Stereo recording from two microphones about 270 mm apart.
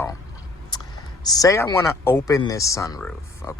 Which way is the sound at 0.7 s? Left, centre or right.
Centre.